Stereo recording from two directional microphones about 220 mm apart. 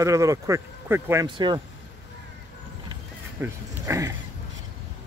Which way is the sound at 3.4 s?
10° right (ahead or behind).